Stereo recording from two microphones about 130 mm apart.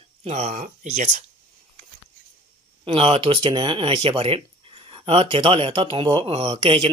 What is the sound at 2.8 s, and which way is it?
Speech, 45° right (ahead or behind).